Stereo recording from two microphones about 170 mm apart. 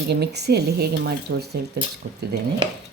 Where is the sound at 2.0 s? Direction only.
60° right (ahead or behind).